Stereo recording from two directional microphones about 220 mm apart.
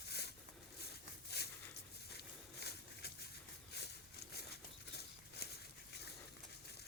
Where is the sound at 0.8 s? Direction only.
50° left (ahead or behind).